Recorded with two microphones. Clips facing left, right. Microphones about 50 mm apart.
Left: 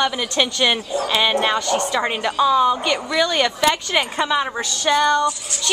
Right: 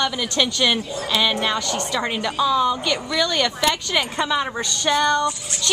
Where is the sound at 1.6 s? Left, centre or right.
Centre.